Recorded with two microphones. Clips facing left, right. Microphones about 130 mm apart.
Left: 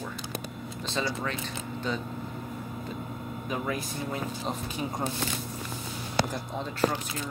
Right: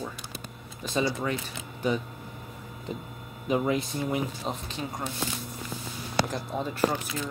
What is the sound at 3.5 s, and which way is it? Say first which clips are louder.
Speech: right 7 dB; 20° right (ahead or behind).